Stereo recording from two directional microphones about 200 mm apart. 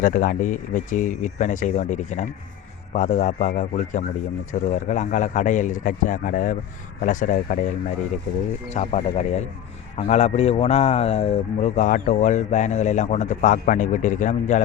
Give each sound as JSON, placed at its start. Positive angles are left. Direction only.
{"t": 0.0, "sound": "speech", "side_deg": 40}